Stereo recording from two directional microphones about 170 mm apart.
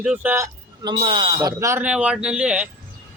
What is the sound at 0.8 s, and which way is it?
Speech, 25° right (ahead or behind).